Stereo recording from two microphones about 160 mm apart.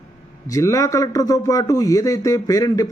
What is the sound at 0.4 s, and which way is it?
A man's voice, 20° left (ahead or behind).